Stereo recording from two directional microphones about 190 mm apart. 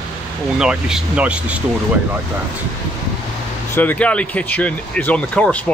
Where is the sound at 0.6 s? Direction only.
5° right (ahead or behind).